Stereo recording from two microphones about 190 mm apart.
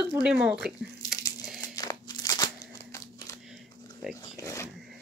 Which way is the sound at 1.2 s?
20° left (ahead or behind).